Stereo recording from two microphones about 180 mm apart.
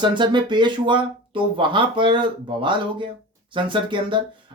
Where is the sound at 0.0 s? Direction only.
25° right (ahead or behind).